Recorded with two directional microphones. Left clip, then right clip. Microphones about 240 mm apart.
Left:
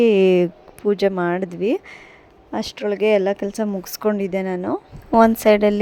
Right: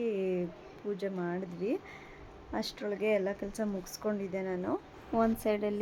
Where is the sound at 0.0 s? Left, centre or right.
Left.